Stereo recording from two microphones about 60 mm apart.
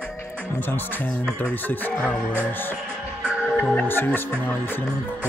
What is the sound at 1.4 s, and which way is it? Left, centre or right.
Speech, left.